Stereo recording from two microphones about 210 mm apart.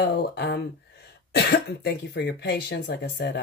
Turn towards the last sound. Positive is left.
turn(degrees=50)  # may be behind; listen again after turning